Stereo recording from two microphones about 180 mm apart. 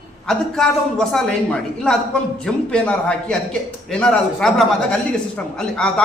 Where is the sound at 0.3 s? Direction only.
Centre (ahead or behind).